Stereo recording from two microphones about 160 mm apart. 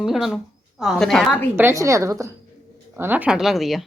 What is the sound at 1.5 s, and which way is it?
A woman's voice, 15° right (ahead or behind).